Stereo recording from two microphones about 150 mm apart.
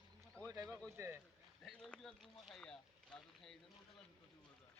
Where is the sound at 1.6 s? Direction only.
5° left (ahead or behind).